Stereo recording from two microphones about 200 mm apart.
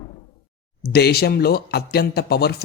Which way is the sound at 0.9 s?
50° left (ahead or behind).